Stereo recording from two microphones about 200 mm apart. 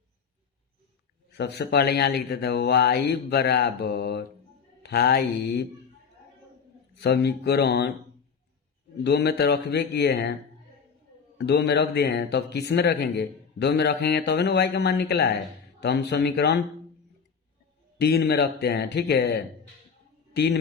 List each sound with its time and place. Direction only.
1.3 s speech: 55° left (ahead or behind)
6.9 s speech: 55° left (ahead or behind)
9.0 s speech: 55° left (ahead or behind)
11.3 s speech: 55° left (ahead or behind)
17.9 s a man's voice: 55° left (ahead or behind)